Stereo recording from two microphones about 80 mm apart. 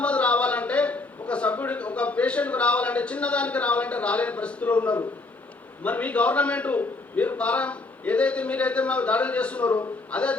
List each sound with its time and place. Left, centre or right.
0.0 s a man's voice: centre